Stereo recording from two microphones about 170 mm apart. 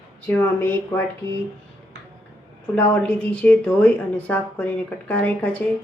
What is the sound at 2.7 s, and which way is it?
A woman's voice, 10° left (ahead or behind).